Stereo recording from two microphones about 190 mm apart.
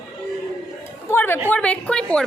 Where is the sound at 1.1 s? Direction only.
10° left (ahead or behind).